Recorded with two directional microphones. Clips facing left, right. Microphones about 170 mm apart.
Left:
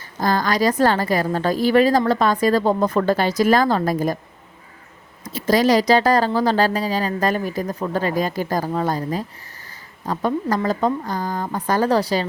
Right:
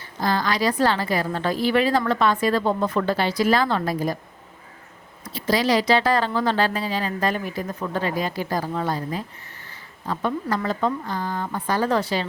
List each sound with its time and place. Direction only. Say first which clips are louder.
0.2 s a woman's voice: left 3 dB; 45° left (ahead or behind)
5.2 s speech: left 5 dB; 45° left (ahead or behind)